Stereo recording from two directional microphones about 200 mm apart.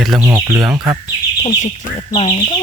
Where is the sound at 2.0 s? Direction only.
30° left (ahead or behind).